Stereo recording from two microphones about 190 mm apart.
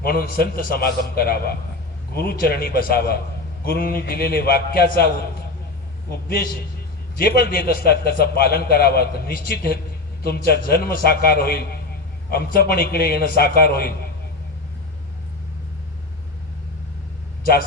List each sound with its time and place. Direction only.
0.0 s a man's voice: 50° left (ahead or behind)
7.2 s a man's voice: 55° left (ahead or behind)